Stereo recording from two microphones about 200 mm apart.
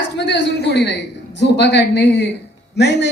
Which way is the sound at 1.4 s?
60° left (ahead or behind).